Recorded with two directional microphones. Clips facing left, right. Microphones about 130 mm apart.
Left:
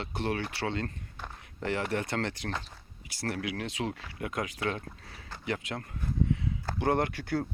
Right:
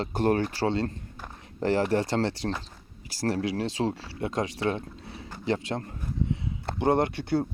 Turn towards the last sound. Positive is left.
turn(degrees=-25)  # may be behind; listen again after turning